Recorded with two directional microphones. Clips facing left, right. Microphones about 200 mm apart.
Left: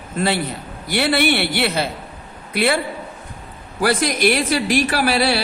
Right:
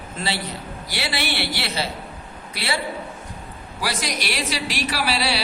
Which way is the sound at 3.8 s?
55° left (ahead or behind).